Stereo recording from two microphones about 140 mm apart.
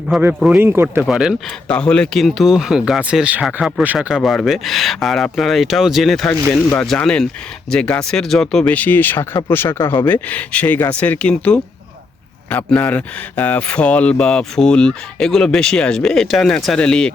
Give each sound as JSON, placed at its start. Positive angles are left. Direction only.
{"t": 0.3, "sound": "speech", "side_deg": -10}
{"t": 1.0, "sound": "speech", "side_deg": -5}
{"t": 1.6, "sound": "speech", "side_deg": 5}